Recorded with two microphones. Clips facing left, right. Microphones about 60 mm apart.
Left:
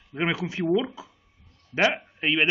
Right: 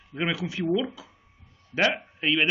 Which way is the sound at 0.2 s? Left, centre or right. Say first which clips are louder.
Left 2 dB; left.